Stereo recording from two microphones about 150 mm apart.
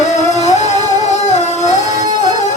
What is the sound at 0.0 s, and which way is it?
Music, 50° left (ahead or behind).